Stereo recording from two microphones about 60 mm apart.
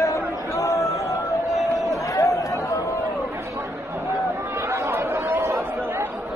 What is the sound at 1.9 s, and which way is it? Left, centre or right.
Run, left.